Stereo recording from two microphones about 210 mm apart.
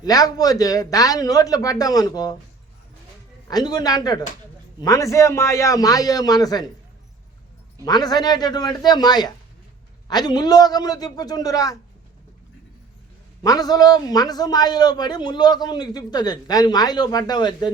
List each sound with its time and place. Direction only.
0.0 s a man's voice: 15° left (ahead or behind)
3.5 s a man's voice: 20° left (ahead or behind)
7.9 s a man's voice: 20° left (ahead or behind)
13.4 s a man's voice: 15° left (ahead or behind)